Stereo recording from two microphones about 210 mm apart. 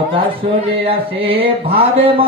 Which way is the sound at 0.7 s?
25° right (ahead or behind).